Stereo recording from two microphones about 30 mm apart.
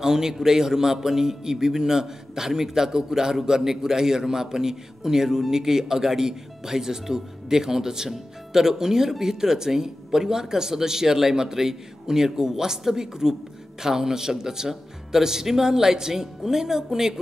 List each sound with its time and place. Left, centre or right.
0.0 s a man's voice: centre